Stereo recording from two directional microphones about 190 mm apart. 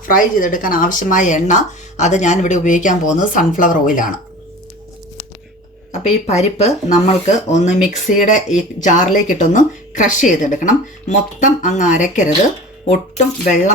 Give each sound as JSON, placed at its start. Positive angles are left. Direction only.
{"t": 0.0, "sound": "speech", "side_deg": 45}
{"t": 5.9, "sound": "a woman's voice", "side_deg": 35}